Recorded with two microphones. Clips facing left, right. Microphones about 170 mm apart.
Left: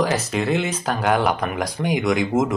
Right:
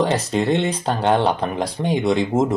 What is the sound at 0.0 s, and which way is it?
Speech, 30° right (ahead or behind).